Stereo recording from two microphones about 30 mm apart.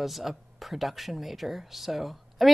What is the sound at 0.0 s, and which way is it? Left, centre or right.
A woman's voice, centre.